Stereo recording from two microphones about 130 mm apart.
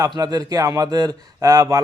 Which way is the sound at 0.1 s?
30° right (ahead or behind).